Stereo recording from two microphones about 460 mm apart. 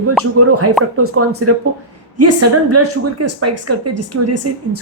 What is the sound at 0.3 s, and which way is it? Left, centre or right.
A woman's voice, right.